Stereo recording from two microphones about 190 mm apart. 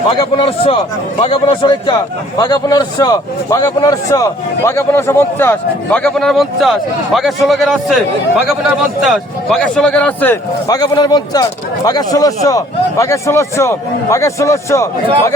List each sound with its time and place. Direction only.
0.3 s a man's voice: 30° left (ahead or behind); by 7.9 s centre (ahead or behind)
9.0 s a man's voice: centre (ahead or behind)